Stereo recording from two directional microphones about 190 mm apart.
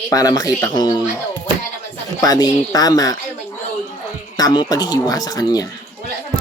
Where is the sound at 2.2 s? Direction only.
20° left (ahead or behind).